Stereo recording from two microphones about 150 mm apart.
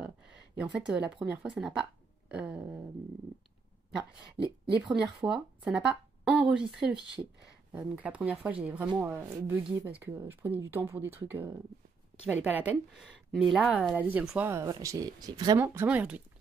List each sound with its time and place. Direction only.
0.6 s speech: 5° right (ahead or behind)
4.4 s a woman's voice: 35° right (ahead or behind)
4.8 s speech: 5° right (ahead or behind)
6.3 s a sound: 5° right (ahead or behind)
6.7 s speech: 5° right (ahead or behind)
14.5 s speech: 20° right (ahead or behind)
15.6 s speech: 15° right (ahead or behind)